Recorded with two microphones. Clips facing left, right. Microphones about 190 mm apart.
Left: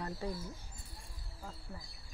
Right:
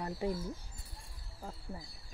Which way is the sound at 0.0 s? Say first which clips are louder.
Right 4 dB; 20° right (ahead or behind).